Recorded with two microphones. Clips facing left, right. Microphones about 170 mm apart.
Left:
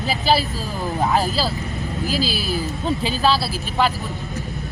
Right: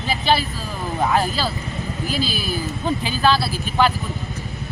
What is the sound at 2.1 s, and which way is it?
Speech, 35° left (ahead or behind).